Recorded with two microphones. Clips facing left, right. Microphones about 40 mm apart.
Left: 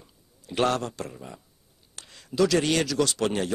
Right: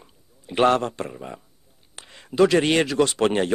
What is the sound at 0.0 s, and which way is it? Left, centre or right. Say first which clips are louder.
A man's voice: right 4 dB; right.